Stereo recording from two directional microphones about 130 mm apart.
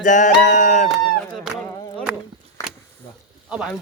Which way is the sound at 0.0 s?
80° left.